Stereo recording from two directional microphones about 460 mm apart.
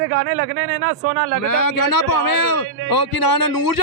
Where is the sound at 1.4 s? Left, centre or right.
Left.